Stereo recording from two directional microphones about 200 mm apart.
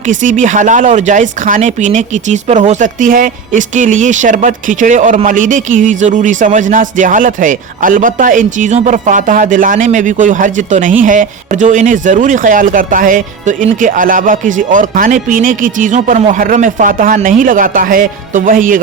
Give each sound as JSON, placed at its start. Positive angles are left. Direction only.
{"t": 0.1, "sound": "speech", "side_deg": -40}